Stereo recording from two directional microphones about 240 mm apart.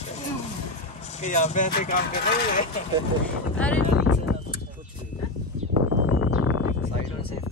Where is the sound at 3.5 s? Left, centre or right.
Centre.